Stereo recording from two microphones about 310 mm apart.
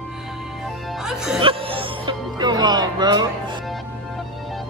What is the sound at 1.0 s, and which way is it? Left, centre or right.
Music, centre.